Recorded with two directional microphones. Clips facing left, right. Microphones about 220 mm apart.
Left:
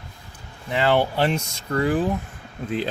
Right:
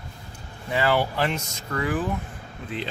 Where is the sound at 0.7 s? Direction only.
25° left (ahead or behind).